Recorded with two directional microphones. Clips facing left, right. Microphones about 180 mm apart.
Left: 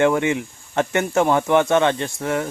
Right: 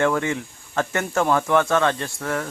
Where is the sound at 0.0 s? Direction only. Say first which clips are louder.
Left 4 dB; 20° left (ahead or behind).